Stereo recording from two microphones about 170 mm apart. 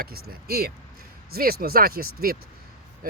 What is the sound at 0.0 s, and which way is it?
Speech, 60° right (ahead or behind).